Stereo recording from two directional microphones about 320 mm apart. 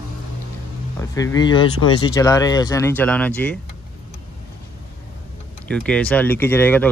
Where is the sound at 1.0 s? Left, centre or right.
Centre.